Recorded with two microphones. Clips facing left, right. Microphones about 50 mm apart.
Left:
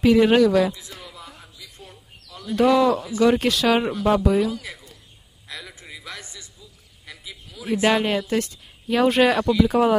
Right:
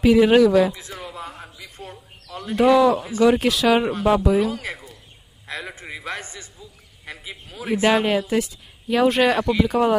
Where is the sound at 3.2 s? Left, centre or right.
Centre.